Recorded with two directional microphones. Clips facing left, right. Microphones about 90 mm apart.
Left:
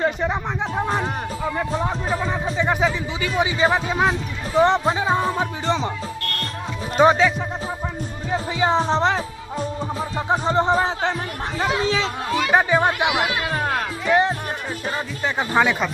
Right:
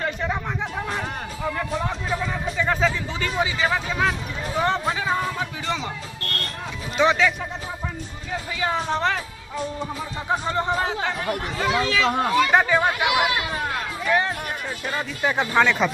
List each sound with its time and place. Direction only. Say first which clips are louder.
0.0 s speech: left 4 dB; 20° left (ahead or behind)
2.3 s music: left 2 dB; 20° left (ahead or behind)
2.8 s speech: left 1 dB; 10° left (ahead or behind)
3.4 s speech: left 5 dB; 25° left (ahead or behind)
6.9 s speech: left 4 dB; 40° left (ahead or behind)
8.3 s music: left 5 dB; 25° left (ahead or behind)
9.6 s speech: left 2 dB; 35° left (ahead or behind)
12.4 s speech: left 3 dB; 15° left (ahead or behind)
13.0 s speech: even; 55° left (ahead or behind)
13.5 s music: left 4 dB; 45° left (ahead or behind)
14.0 s music: left 4 dB; 25° left (ahead or behind)
15.6 s speech: left 1 dB; 15° left (ahead or behind)